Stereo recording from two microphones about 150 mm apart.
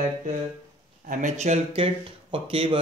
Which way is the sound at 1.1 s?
55° right (ahead or behind).